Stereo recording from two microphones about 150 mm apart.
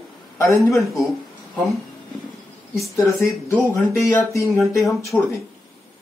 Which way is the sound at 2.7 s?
20° left (ahead or behind).